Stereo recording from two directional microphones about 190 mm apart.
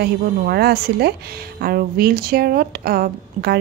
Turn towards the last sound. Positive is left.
turn(degrees=-55)  # may be behind; listen again after turning